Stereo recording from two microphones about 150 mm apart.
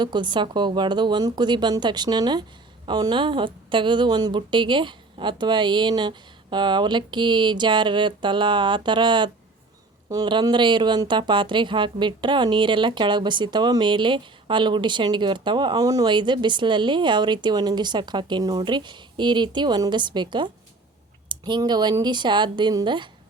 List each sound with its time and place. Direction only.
0.0 s speech: 30° right (ahead or behind)